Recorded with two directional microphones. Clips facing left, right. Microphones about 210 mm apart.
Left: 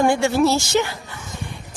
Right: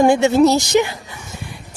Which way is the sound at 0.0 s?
20° right (ahead or behind).